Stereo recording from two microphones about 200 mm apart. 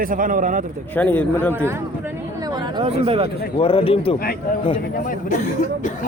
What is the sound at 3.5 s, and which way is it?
Speech, 25° left (ahead or behind).